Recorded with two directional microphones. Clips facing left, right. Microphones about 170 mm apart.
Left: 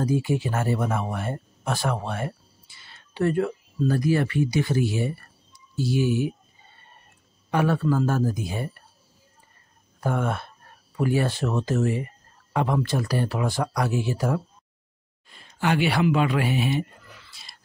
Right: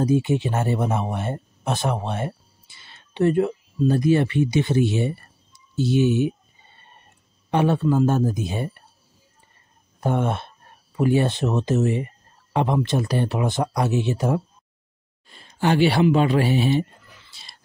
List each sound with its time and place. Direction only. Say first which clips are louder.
0.0 s speech: right 4 dB; 25° right (ahead or behind)
7.5 s speech: right 3 dB; 20° right (ahead or behind)
9.9 s speech: right 3 dB; 25° right (ahead or behind)
17.3 s wild animals: right 1 dB; 30° right (ahead or behind)